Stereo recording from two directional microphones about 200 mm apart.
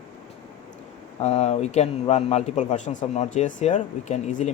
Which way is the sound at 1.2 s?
35° left (ahead or behind).